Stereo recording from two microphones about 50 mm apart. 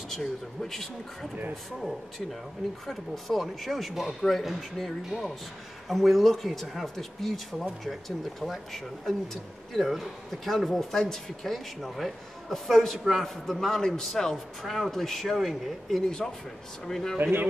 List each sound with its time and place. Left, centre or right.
0.1 s speech: centre
16.1 s a man's voice: centre
17.2 s speech: right